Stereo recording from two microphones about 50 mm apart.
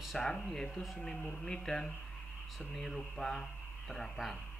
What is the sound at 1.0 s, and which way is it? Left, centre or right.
Speech, centre.